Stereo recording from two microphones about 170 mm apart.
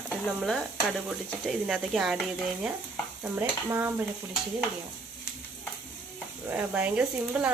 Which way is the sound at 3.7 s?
15° right (ahead or behind).